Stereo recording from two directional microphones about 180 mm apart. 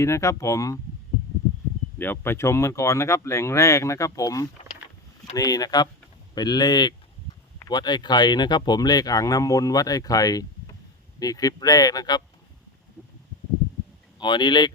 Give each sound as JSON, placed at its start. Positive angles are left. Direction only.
{"t": 0.0, "sound": "speech", "side_deg": 15}
{"t": 2.0, "sound": "speech", "side_deg": 10}
{"t": 14.2, "sound": "speech", "side_deg": 25}